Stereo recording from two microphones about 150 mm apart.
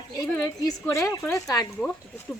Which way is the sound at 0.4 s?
25° left (ahead or behind).